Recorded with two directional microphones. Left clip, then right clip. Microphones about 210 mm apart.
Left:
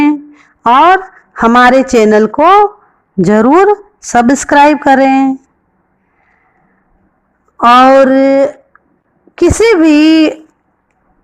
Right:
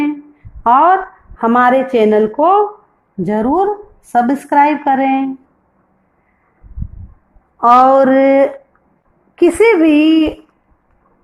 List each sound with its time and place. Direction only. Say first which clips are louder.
0.0 s a sound: left 8 dB; 30° left (ahead or behind)
1.4 s a woman's voice: left 5 dB; 30° left (ahead or behind)
7.6 s a woman's voice: left 4 dB; 25° left (ahead or behind)